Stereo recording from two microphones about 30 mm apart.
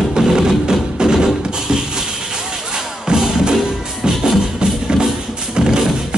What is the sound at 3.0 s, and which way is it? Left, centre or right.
Music, right.